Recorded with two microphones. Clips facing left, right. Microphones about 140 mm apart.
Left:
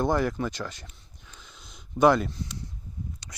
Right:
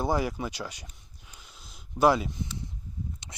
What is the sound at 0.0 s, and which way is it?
Speech, 10° right (ahead or behind).